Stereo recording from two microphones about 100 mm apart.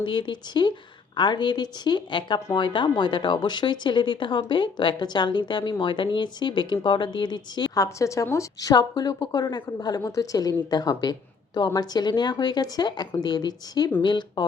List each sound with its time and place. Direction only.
0.0 s speech: 50° left (ahead or behind)
7.9 s a woman's voice: 30° left (ahead or behind)
8.7 s a woman's voice: 45° left (ahead or behind)